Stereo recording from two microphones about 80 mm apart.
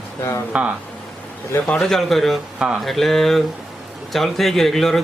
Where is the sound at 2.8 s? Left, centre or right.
Centre.